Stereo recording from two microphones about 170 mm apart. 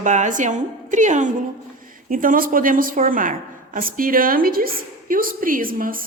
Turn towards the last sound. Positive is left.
turn(degrees=-55)  # may be behind; listen again after turning